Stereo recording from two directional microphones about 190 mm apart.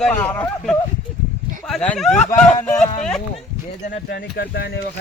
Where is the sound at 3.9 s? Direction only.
65° left (ahead or behind).